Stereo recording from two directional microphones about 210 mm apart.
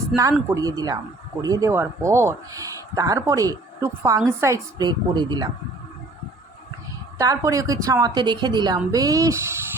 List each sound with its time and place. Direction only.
0.2 s a woman's voice: 15° right (ahead or behind)
7.2 s speech: 15° right (ahead or behind)